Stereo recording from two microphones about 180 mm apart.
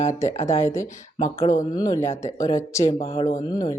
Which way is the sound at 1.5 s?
20° left (ahead or behind).